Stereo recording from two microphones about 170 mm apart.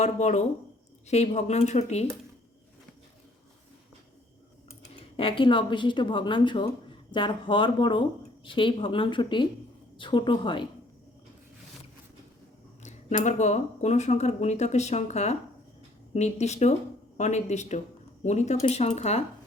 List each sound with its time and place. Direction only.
0.0 s speech: 40° left (ahead or behind)
5.1 s speech: 30° left (ahead or behind)
12.8 s speech: 45° left (ahead or behind)